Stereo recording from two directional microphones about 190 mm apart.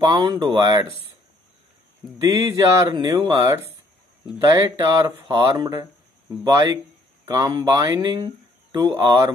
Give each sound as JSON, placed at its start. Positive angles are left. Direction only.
{"t": 0.0, "sound": "speech", "side_deg": -20}
{"t": 2.3, "sound": "speech", "side_deg": -15}